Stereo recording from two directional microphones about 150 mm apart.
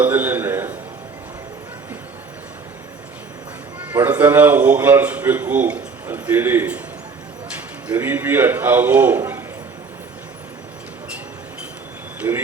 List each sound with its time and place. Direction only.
0.0 s a sound: 10° right (ahead or behind)
3.9 s a man's voice: 10° right (ahead or behind)
7.9 s a man's voice: 10° right (ahead or behind)
12.2 s speech: 20° right (ahead or behind)